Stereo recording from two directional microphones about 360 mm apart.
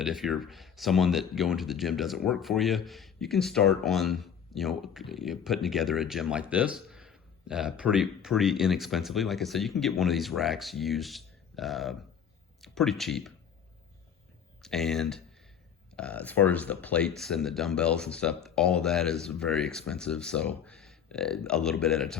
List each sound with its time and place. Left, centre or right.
0.0 s speech: centre
14.6 s speech: centre